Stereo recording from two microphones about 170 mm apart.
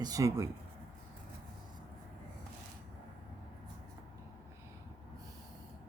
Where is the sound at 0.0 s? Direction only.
20° right (ahead or behind).